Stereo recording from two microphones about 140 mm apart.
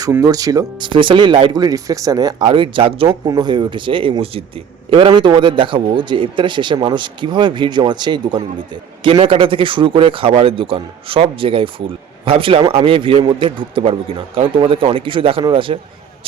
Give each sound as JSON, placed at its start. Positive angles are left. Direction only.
{"t": 0.1, "sound": "speech", "side_deg": -25}
{"t": 3.1, "sound": "speech", "side_deg": -25}